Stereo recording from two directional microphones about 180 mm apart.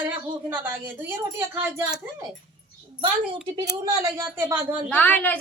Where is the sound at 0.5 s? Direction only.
10° right (ahead or behind).